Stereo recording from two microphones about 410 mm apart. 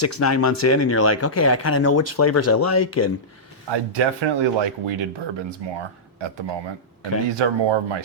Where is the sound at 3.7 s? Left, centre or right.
Right.